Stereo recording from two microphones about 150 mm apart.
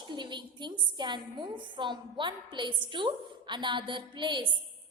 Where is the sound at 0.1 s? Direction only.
30° right (ahead or behind).